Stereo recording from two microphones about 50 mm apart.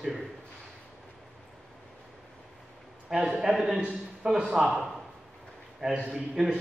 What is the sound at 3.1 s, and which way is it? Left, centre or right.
A man's voice, centre.